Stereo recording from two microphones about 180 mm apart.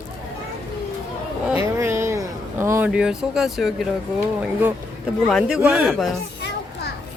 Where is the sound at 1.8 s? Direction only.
15° right (ahead or behind).